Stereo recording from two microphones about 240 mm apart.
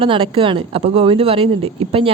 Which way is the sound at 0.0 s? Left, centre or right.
Right.